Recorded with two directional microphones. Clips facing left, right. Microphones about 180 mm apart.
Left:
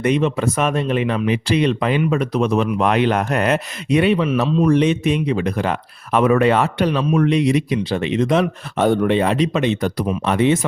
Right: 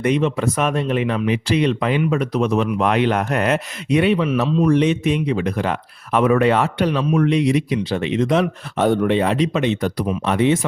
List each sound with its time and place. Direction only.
0.0 s speech: 20° left (ahead or behind)
4.7 s speech: 35° left (ahead or behind)
8.3 s speech: 25° left (ahead or behind)
8.8 s speech: 50° left (ahead or behind)